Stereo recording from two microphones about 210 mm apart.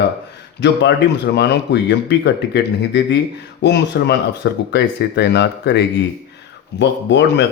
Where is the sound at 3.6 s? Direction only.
55° left (ahead or behind).